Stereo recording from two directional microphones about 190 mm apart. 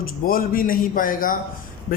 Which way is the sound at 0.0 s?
50° left (ahead or behind).